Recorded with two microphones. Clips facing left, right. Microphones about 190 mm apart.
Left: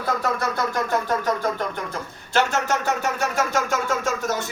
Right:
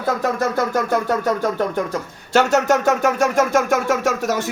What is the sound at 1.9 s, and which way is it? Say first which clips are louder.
Speech: right 7 dB; 45° right (ahead or behind).